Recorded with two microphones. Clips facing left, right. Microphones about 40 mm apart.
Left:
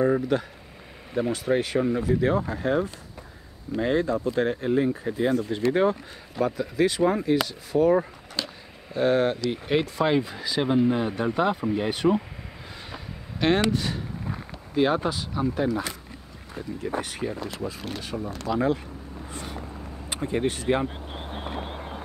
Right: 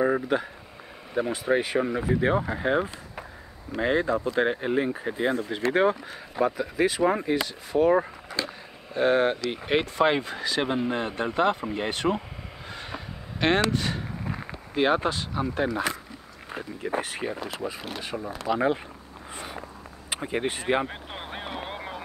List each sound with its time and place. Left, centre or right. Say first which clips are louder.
0.0 s speech: left 1 dB; centre
10.2 s speech: right 1 dB; centre
10.6 s speech: left 5 dB; centre
12.7 s a sound: right 3 dB; centre
13.7 s speech: left 1 dB; centre
18.5 s speech: even; right
19.3 s vehicle: even; centre
20.1 s a sound: left 2 dB; centre; by 22.0 s right